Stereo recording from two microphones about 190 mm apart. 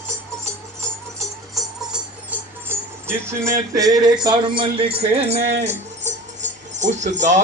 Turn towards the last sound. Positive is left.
turn(degrees=-40)  # may be behind; listen again after turning